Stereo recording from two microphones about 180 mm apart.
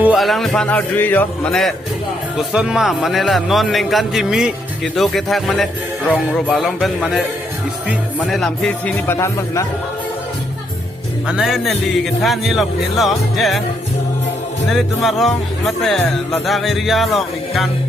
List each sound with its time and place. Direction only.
0.0 s speech: 5° right (ahead or behind)
8.2 s speech: 5° left (ahead or behind)
9.1 s speech: 15° left (ahead or behind)
11.3 s speech: centre (ahead or behind)
14.7 s speech: centre (ahead or behind)